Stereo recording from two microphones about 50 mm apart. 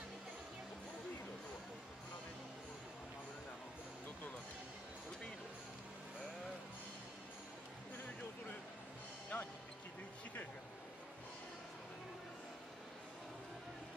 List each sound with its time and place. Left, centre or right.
9.3 s basketball bounce: left